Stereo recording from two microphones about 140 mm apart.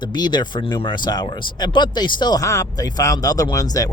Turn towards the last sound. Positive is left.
turn(degrees=25)  # may be behind; listen again after turning